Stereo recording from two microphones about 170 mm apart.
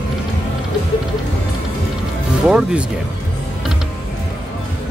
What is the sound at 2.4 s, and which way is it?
Speech, 5° right (ahead or behind).